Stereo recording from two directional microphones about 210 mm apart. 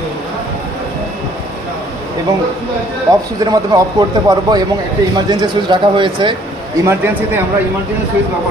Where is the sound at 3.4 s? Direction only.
20° right (ahead or behind).